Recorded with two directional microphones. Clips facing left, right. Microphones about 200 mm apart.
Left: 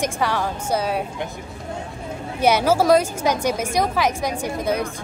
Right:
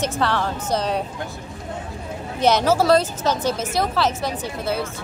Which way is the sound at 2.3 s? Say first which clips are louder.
Even; 10° left (ahead or behind).